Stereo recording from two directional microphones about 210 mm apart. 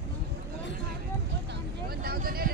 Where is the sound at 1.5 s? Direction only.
45° right (ahead or behind).